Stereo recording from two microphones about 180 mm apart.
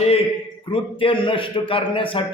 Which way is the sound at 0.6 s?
30° left (ahead or behind).